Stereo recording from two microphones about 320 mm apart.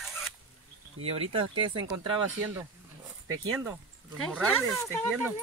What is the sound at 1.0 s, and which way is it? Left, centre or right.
Speech, centre.